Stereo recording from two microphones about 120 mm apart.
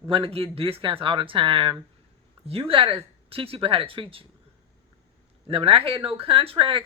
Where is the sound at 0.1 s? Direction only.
50° right (ahead or behind).